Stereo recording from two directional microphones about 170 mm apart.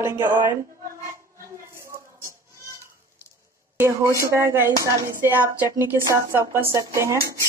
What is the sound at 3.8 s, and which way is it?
Speech, 15° right (ahead or behind).